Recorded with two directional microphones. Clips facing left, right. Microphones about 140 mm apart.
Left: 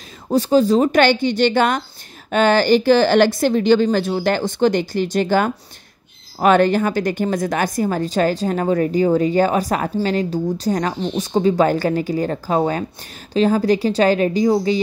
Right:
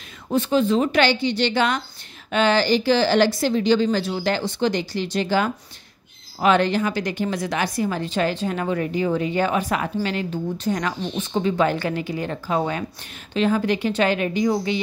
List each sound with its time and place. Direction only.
0.3 s a woman's voice: 35° left (ahead or behind)